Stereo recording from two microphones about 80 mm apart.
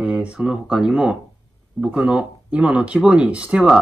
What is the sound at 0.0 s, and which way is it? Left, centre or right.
Speech, centre.